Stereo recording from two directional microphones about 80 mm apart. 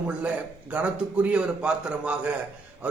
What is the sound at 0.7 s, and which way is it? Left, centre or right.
A man's voice, centre.